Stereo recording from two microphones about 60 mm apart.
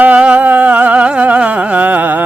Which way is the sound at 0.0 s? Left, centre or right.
Right.